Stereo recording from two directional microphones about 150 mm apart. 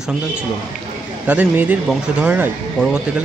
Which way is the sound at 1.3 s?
10° right (ahead or behind).